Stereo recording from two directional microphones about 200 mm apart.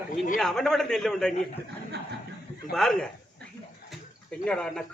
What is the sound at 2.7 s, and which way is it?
Speech, centre (ahead or behind).